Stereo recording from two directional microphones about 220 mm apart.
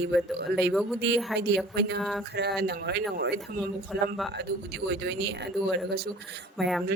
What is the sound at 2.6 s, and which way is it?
Speech, 50° right (ahead or behind).